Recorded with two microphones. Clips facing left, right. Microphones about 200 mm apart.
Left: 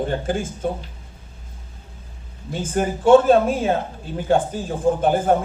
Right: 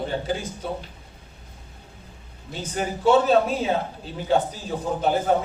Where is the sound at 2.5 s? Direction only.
50° left (ahead or behind).